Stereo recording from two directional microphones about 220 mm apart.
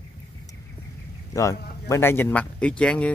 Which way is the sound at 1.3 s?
15° left (ahead or behind).